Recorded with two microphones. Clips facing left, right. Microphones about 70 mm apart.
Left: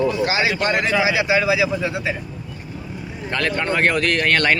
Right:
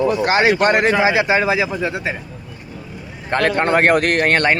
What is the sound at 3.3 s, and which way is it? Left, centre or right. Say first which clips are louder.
Speech: right 6 dB; right.